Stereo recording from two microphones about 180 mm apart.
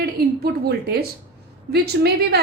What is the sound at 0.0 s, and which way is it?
A woman's voice, 60° right (ahead or behind).